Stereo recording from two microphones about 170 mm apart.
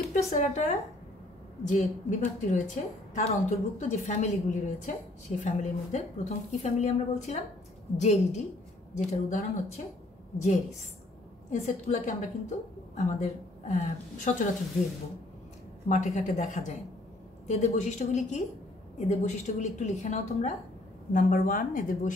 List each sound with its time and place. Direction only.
0.1 s a woman's voice: 45° left (ahead or behind)
11.5 s a woman's voice: 40° left (ahead or behind)
15.9 s a woman's voice: 45° left (ahead or behind)